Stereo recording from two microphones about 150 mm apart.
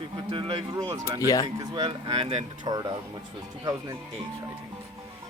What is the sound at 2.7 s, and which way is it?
Speech, 30° right (ahead or behind).